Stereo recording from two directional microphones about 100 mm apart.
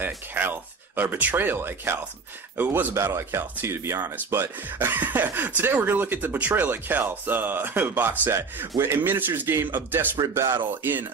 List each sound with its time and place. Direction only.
0.0 s speech: 20° right (ahead or behind)